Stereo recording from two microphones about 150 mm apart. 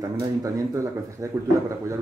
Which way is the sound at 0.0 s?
20° right (ahead or behind).